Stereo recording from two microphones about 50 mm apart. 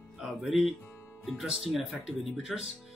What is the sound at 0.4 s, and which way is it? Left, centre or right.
Speech, centre.